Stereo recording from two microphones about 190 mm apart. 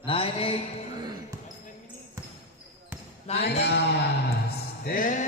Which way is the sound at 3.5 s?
60° left (ahead or behind).